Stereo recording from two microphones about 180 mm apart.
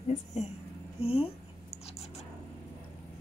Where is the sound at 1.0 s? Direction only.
30° left (ahead or behind).